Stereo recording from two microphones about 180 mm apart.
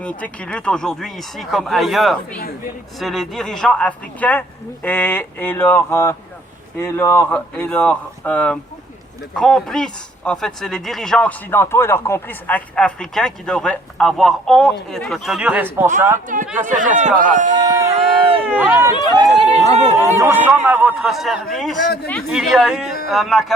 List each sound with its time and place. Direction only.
0.0 s speech: 5° left (ahead or behind); by 15.9 s 10° right (ahead or behind)
16.3 s speech: 50° right (ahead or behind)
17.7 s a sound: 15° right (ahead or behind)
18.4 s speech: 10° right (ahead or behind)
19.1 s speech: 35° right (ahead or behind)
20.0 s speech: 10° right (ahead or behind)